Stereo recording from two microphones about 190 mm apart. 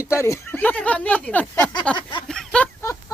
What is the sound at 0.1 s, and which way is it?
Speech, 15° left (ahead or behind).